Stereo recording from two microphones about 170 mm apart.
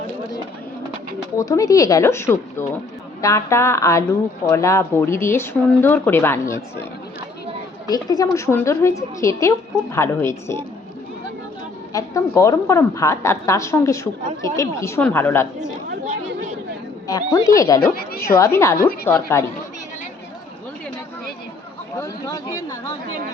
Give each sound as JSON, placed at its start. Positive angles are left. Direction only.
{"t": 1.4, "sound": "a woman's voice", "side_deg": 20}
{"t": 7.9, "sound": "a woman's voice", "side_deg": 20}
{"t": 11.9, "sound": "a woman's voice", "side_deg": 20}
{"t": 17.1, "sound": "speech", "side_deg": 20}
{"t": 17.9, "sound": "a woman's voice", "side_deg": 65}
{"t": 18.3, "sound": "a woman's voice", "side_deg": 15}
{"t": 21.9, "sound": "speech", "side_deg": 20}